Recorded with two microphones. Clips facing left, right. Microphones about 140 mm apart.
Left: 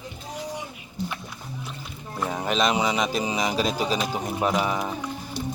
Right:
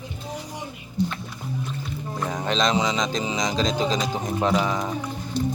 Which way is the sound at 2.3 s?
5° left (ahead or behind).